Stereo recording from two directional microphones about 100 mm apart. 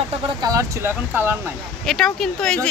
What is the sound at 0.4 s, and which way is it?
Speech, 40° right (ahead or behind).